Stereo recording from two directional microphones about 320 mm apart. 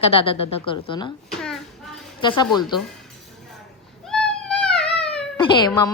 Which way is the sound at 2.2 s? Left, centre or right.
Centre.